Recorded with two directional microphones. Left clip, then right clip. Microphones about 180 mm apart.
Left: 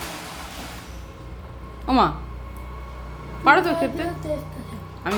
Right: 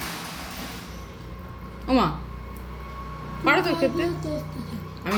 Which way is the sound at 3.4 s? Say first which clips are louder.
Left 5 dB; 35° left (ahead or behind).